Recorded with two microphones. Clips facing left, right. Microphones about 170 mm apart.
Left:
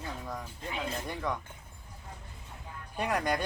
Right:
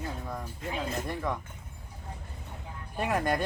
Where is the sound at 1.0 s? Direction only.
5° right (ahead or behind).